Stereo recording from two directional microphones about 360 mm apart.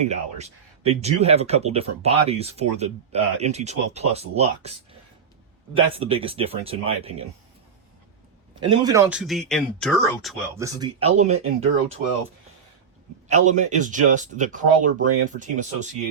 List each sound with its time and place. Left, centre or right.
0.0 s speech: centre
5.7 s speech: centre
8.6 s speech: centre
11.3 s speech: right
13.2 s speech: centre